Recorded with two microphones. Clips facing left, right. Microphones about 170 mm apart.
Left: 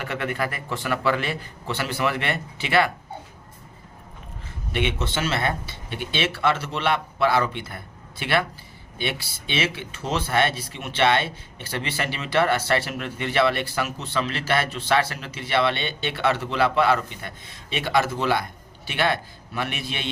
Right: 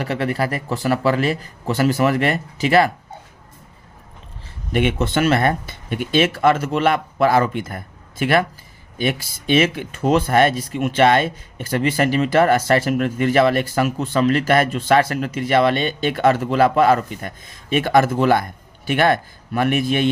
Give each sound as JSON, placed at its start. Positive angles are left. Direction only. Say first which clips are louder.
{"t": 0.0, "sound": "speech", "louder": "right 6 dB", "side_deg": -35}
{"t": 4.7, "sound": "speech", "louder": "right 7 dB", "side_deg": -45}